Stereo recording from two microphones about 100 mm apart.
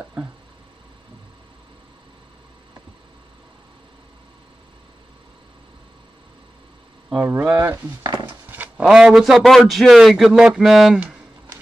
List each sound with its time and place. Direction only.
7.2 s speech: 20° right (ahead or behind)
8.0 s a sound: 45° right (ahead or behind)
8.5 s a man's voice: 15° right (ahead or behind)